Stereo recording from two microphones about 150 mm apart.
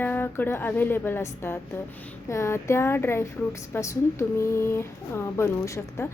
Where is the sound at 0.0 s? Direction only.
15° left (ahead or behind).